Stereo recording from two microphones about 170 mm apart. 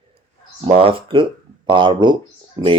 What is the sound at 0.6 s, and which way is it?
Speech, 35° right (ahead or behind).